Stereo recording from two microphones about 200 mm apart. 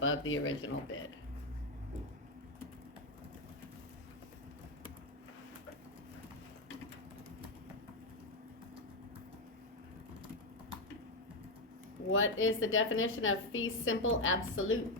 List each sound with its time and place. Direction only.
0.0 s a woman's voice: 80° left
12.1 s a woman's voice: 90° left